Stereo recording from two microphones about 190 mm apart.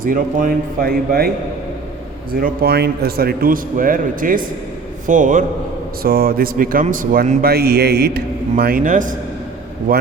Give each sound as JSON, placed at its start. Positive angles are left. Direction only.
{"t": 0.0, "sound": "speech", "side_deg": -45}
{"t": 2.4, "sound": "speech", "side_deg": -55}